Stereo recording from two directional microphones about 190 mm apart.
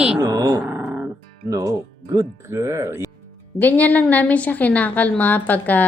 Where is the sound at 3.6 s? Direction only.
10° left (ahead or behind).